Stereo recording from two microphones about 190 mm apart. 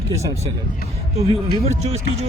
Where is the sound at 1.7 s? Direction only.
35° right (ahead or behind).